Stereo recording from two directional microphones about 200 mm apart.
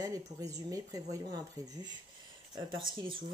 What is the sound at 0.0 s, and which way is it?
Speech, 15° right (ahead or behind).